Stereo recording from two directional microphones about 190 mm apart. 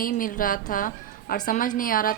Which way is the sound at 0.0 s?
45° left (ahead or behind).